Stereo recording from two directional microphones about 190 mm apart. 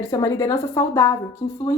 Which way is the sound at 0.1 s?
20° left (ahead or behind).